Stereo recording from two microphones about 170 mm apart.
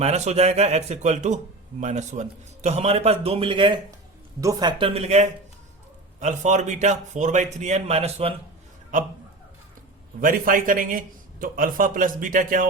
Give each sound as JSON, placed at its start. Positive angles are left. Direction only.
{"t": 0.0, "sound": "a man's voice", "side_deg": -40}
{"t": 4.8, "sound": "a man's voice", "side_deg": -40}
{"t": 10.2, "sound": "speech", "side_deg": -55}